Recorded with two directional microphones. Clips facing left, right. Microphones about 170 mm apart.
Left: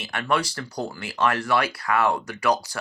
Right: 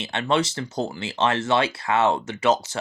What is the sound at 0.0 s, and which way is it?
Speech, 25° right (ahead or behind).